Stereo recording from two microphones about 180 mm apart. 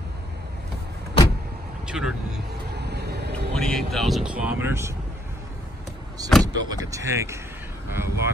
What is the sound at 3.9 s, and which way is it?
Speech, centre (ahead or behind).